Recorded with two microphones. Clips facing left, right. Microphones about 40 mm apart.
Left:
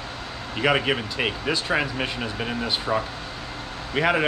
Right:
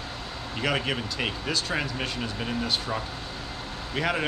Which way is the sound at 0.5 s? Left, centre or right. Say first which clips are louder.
Left 6 dB; centre.